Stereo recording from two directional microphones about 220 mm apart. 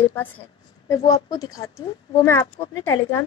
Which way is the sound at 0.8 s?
15° left (ahead or behind).